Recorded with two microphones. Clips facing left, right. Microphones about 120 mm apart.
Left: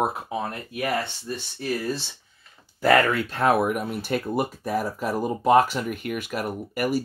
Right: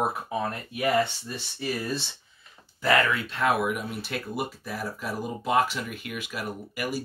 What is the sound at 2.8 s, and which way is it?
Speech, 50° left (ahead or behind).